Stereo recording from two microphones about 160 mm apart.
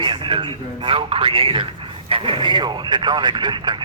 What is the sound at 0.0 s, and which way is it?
Speech, 35° right (ahead or behind).